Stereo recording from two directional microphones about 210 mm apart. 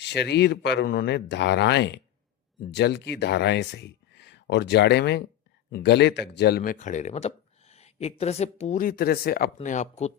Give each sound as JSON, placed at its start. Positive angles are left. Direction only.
{"t": 0.0, "sound": "a woman's voice", "side_deg": 55}
{"t": 9.6, "sound": "a woman's voice", "side_deg": 35}